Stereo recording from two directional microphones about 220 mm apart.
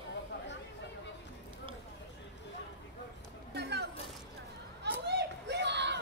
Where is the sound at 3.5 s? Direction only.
50° right (ahead or behind).